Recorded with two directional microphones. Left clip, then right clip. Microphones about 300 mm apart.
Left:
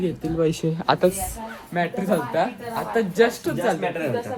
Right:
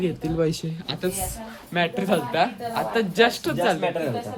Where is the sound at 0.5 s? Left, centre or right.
Centre.